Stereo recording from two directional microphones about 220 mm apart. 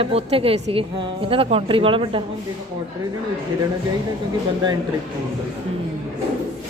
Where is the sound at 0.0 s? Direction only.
25° right (ahead or behind).